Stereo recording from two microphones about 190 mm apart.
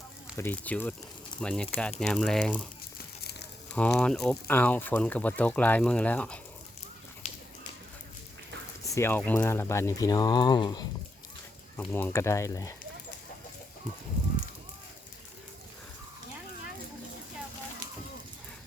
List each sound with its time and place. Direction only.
0.3 s speech: 10° left (ahead or behind)
3.7 s speech: 5° left (ahead or behind)
7.2 s a sound: 30° left (ahead or behind)
9.0 s speech: 10° left (ahead or behind)
11.8 s speech: 10° left (ahead or behind)